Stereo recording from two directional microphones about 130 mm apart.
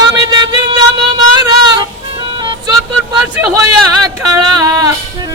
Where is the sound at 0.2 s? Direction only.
35° right (ahead or behind).